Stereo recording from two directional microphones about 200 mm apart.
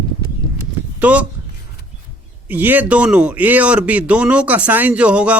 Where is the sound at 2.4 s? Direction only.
10° right (ahead or behind).